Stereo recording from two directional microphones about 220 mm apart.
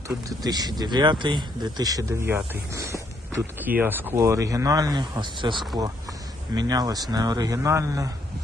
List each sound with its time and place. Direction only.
0.3 s speech: 15° right (ahead or behind)